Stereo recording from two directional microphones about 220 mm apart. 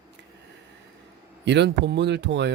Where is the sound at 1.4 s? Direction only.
50° right (ahead or behind).